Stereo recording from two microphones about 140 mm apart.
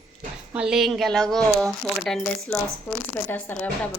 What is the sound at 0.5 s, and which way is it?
Speech, 5° right (ahead or behind).